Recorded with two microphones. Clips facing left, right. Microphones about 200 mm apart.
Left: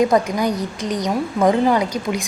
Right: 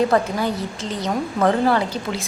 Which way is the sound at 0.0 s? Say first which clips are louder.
Left 2 dB; 15° left (ahead or behind).